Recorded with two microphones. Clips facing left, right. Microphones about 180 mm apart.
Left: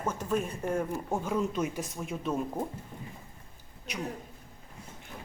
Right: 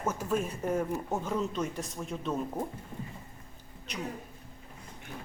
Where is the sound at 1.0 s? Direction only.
10° left (ahead or behind).